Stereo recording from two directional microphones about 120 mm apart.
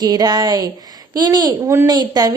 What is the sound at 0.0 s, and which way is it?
A woman's voice, 35° right (ahead or behind).